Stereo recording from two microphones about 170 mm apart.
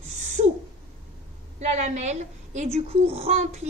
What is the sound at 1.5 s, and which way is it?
A woman's voice, 40° right (ahead or behind).